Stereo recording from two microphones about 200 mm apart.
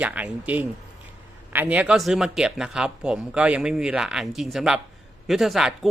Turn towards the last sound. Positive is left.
turn(degrees=0)  # may be behind; listen again after turning